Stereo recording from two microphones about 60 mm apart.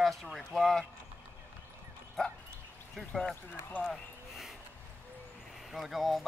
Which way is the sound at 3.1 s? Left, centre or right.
Centre.